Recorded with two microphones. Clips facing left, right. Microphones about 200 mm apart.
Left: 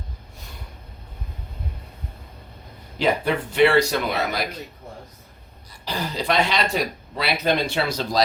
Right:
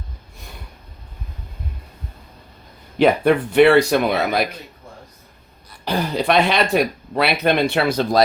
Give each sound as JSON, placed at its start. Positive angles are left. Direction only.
{"t": 3.0, "sound": "speech", "side_deg": -60}
{"t": 5.8, "sound": "speech", "side_deg": -60}